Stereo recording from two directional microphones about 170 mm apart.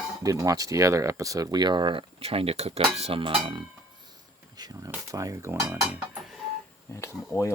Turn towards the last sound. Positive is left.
turn(degrees=15)  # may be behind; listen again after turning